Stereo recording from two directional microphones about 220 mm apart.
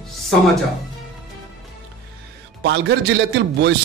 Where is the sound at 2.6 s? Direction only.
50° right (ahead or behind).